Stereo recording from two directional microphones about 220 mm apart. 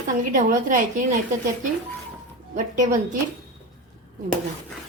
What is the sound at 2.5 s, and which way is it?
Speech, 35° right (ahead or behind).